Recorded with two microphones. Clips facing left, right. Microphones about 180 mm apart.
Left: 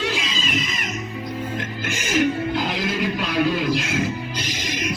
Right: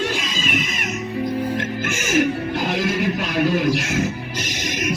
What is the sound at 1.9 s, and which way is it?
Music, 50° right (ahead or behind).